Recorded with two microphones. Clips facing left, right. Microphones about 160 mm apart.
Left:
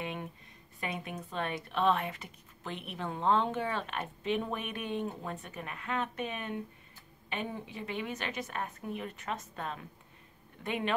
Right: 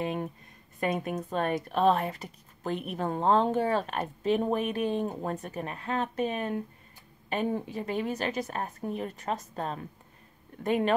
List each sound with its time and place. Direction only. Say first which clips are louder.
0.0 s speech: right 7 dB; 40° right (ahead or behind)